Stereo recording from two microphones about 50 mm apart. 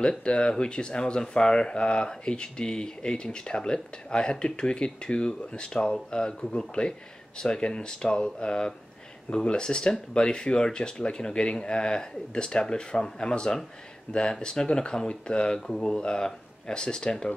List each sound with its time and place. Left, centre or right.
0.2 s speech: centre